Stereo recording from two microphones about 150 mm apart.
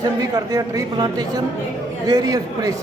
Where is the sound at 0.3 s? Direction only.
25° right (ahead or behind).